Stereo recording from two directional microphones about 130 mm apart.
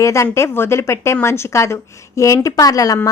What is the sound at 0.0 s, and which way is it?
A woman's voice, 25° left (ahead or behind).